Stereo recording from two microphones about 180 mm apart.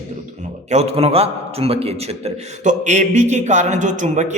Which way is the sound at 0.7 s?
35° right (ahead or behind).